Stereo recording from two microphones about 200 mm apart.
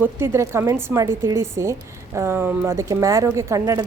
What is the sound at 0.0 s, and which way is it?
A woman's voice, 10° right (ahead or behind).